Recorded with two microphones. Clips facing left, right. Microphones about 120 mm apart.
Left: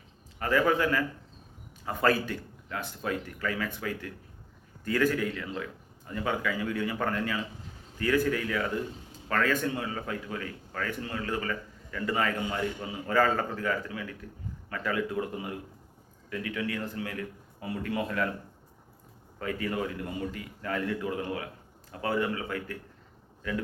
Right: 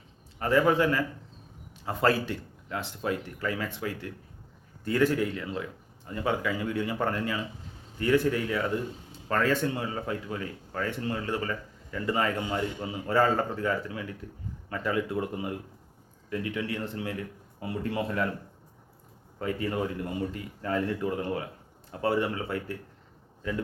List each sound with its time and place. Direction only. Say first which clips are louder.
0.3 s a man's voice: right 2 dB; 25° right (ahead or behind)
19.4 s a man's voice: right 2 dB; 25° right (ahead or behind)